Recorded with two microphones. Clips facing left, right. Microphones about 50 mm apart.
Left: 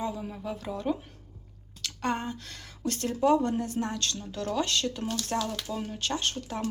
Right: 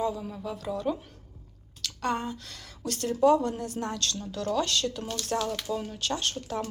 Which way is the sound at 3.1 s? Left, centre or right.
Centre.